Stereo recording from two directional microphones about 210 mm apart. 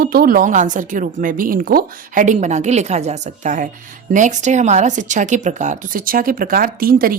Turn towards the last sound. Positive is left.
turn(degrees=-45)  # may be behind; listen again after turning